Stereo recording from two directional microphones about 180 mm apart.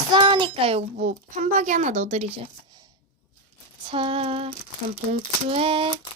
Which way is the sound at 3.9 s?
30° right (ahead or behind).